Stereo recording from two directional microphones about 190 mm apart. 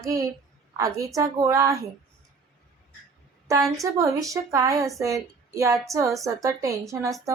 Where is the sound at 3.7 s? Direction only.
15° right (ahead or behind).